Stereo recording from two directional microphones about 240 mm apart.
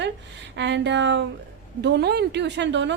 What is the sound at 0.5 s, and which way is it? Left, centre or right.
A woman's voice, right.